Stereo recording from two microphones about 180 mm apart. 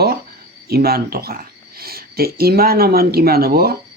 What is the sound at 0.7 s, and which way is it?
Speech, 60° right (ahead or behind).